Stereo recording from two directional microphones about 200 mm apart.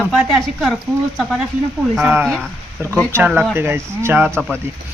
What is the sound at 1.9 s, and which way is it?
Speech, 5° right (ahead or behind).